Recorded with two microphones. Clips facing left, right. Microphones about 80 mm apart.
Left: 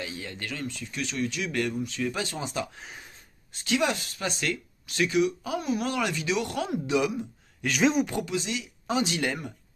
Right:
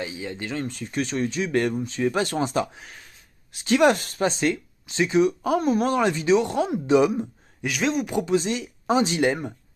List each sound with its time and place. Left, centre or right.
0.0 s speech: right
0.7 s speech: right
2.2 s speech: right
4.2 s speech: right
5.2 s speech: right
7.6 s speech: centre
8.3 s speech: right